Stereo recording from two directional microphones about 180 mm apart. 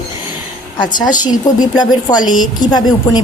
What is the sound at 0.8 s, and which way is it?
A woman's voice, 25° left (ahead or behind).